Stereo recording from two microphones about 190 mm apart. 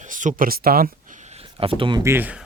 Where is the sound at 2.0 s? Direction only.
10° right (ahead or behind).